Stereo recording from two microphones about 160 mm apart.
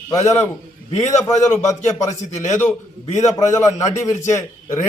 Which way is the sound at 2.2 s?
50° left (ahead or behind).